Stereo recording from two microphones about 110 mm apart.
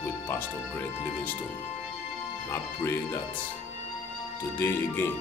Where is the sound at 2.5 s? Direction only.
25° left (ahead or behind).